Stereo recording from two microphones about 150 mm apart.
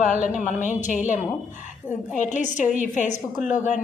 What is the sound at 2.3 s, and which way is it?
A woman's voice, 55° left (ahead or behind).